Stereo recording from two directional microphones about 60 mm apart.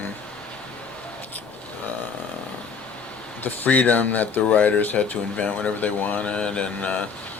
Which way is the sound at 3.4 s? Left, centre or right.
Left.